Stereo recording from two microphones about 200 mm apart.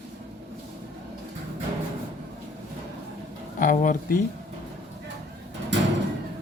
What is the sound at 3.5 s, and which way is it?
Speech, 40° left (ahead or behind).